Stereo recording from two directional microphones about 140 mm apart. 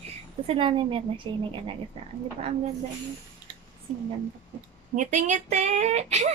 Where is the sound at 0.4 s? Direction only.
40° right (ahead or behind).